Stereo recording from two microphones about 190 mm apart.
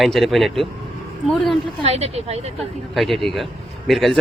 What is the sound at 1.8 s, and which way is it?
Speech, 35° right (ahead or behind).